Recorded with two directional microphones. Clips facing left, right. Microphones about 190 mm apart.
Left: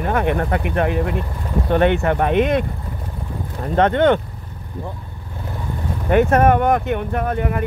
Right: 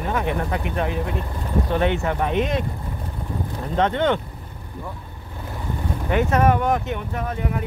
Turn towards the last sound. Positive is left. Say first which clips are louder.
# left 5 dB
turn(degrees=60)  # may be behind; listen again after turning